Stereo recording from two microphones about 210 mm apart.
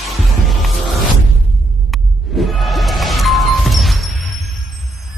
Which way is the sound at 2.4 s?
Centre (ahead or behind).